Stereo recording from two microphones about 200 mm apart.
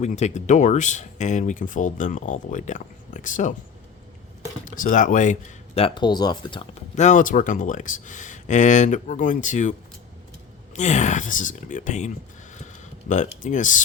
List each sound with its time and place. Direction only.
0.0 s speech: 35° left (ahead or behind)
4.6 s speech: 45° left (ahead or behind); by 6.7 s 25° left (ahead or behind)
6.9 s speech: 35° left (ahead or behind)
10.8 s speech: 35° left (ahead or behind)